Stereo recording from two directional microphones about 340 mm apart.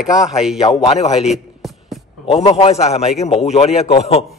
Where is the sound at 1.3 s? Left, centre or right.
Centre.